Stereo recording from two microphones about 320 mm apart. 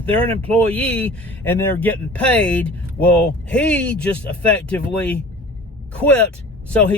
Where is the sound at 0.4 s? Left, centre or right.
Centre.